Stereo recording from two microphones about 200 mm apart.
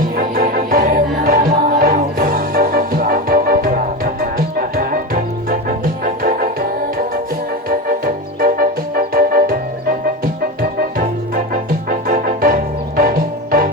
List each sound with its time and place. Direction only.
0.2 s music: 45° right (ahead or behind)
7.7 s music: 45° right (ahead or behind)
10.6 s music: 45° right (ahead or behind)